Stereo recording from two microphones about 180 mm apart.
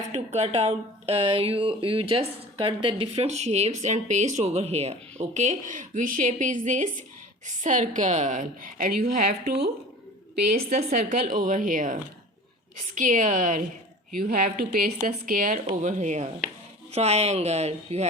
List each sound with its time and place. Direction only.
0.1 s a woman's voice: 35° right (ahead or behind); by 9.6 s 60° right (ahead or behind)
10.7 s a woman's voice: 50° right (ahead or behind); by 18.1 s 35° right (ahead or behind)